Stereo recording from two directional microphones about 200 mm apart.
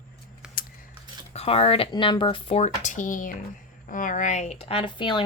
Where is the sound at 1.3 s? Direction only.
30° left (ahead or behind).